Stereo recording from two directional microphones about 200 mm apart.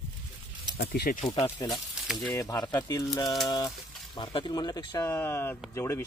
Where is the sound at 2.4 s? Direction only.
20° left (ahead or behind).